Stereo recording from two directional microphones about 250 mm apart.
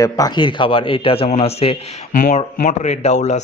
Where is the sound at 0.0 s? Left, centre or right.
Centre.